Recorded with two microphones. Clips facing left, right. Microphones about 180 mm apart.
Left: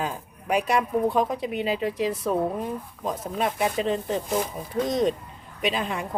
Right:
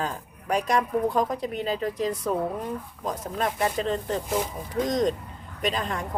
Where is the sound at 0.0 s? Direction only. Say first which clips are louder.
Left 1 dB; 10° left (ahead or behind).